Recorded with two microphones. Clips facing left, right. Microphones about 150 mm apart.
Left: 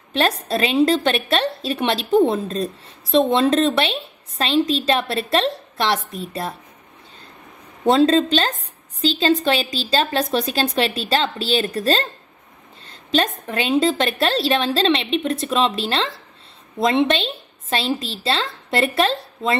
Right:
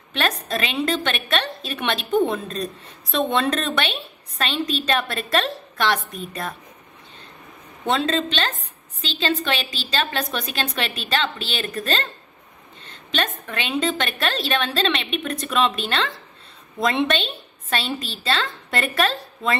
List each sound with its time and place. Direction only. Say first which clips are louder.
0.5 s a woman's voice: left 7 dB; 35° left (ahead or behind)
7.8 s a woman's voice: left 7 dB; 35° left (ahead or behind)